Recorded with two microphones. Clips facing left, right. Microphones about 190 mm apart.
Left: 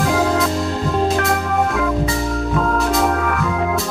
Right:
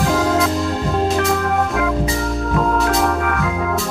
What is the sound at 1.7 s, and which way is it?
Organ, centre (ahead or behind).